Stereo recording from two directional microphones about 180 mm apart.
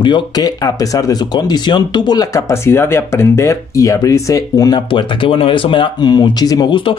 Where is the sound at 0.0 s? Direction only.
25° left (ahead or behind).